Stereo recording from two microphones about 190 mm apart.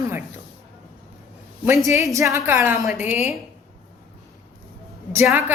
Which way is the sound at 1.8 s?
15° right (ahead or behind).